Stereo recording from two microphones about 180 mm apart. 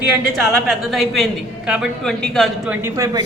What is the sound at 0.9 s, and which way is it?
A man's voice, centre (ahead or behind).